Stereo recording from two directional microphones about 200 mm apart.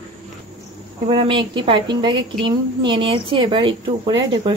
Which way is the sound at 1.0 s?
25° right (ahead or behind).